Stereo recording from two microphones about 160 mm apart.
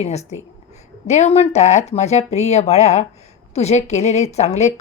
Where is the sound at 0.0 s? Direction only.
45° left (ahead or behind).